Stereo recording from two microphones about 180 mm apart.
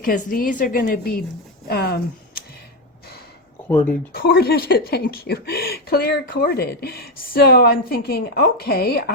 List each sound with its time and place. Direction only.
0.0 s a woman's voice: 50° left (ahead or behind)
3.7 s speech: 10° left (ahead or behind)
4.1 s speech: 60° left (ahead or behind)